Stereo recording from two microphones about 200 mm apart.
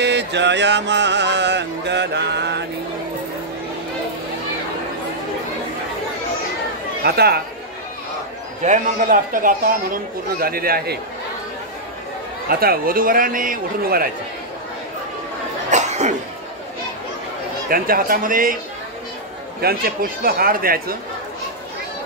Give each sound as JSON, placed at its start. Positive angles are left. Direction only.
{"t": 0.0, "sound": "music", "side_deg": -60}
{"t": 7.0, "sound": "speech", "side_deg": -50}
{"t": 8.6, "sound": "a man's voice", "side_deg": -40}
{"t": 12.4, "sound": "a man's voice", "side_deg": -50}
{"t": 15.7, "sound": "cough", "side_deg": -35}
{"t": 17.6, "sound": "a man's voice", "side_deg": -45}
{"t": 19.6, "sound": "a man's voice", "side_deg": -50}